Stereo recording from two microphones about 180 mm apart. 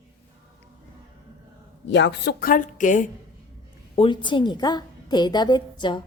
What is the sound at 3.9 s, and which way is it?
A woman's voice, 30° left (ahead or behind).